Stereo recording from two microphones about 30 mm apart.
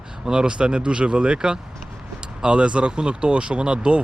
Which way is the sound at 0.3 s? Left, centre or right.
Right.